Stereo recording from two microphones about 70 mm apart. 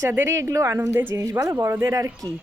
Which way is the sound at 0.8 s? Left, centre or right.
Right.